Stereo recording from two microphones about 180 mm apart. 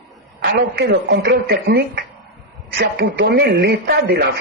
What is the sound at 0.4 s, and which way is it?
Speech, 65° right (ahead or behind).